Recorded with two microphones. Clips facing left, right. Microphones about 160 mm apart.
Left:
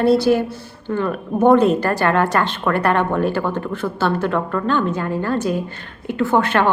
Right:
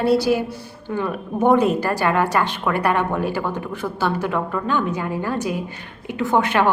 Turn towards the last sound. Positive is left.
turn(degrees=-15)  # may be behind; listen again after turning